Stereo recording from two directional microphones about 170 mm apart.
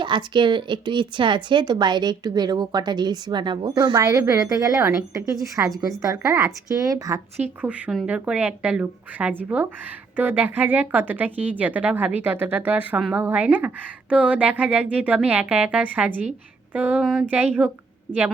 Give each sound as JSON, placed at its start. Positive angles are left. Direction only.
{"t": 0.0, "sound": "a woman's voice", "side_deg": -25}
{"t": 7.6, "sound": "a woman's voice", "side_deg": -10}